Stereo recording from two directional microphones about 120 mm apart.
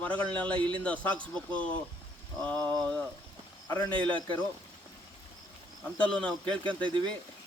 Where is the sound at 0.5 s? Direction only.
40° right (ahead or behind).